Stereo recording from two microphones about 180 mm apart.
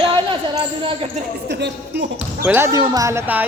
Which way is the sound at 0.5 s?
30° right (ahead or behind).